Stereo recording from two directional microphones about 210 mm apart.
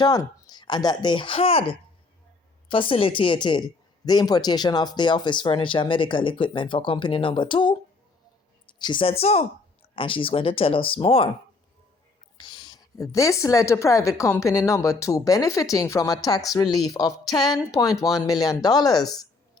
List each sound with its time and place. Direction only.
0.0 s speech: 20° left (ahead or behind)
12.4 s a woman's voice: 20° left (ahead or behind)